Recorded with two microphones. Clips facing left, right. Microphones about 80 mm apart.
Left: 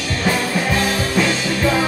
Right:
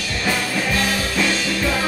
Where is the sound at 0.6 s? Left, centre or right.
Left.